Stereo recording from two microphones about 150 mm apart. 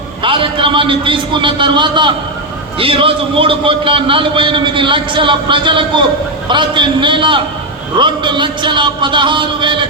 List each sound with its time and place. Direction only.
0.2 s a man's voice: 35° right (ahead or behind)